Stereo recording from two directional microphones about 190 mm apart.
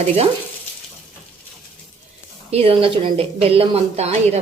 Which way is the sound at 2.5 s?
30° right (ahead or behind).